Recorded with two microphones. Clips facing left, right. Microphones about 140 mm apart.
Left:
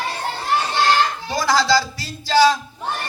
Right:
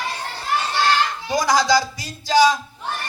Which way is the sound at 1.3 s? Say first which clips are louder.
Right 1 dB; 15° right (ahead or behind).